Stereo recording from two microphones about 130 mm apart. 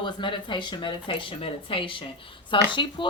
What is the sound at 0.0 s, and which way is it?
Speech, 40° left (ahead or behind).